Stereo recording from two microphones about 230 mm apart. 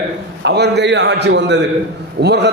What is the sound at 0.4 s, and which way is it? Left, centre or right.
A man's voice, right.